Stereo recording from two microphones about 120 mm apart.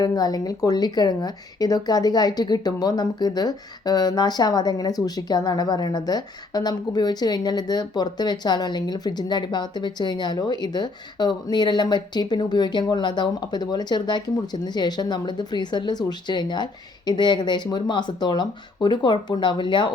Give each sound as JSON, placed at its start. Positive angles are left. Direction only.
{"t": 0.0, "sound": "speech", "side_deg": 35}